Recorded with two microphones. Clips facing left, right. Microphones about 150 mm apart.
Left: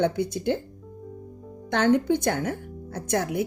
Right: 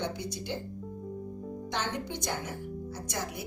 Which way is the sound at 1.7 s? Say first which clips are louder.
Left 15 dB; 55° left (ahead or behind).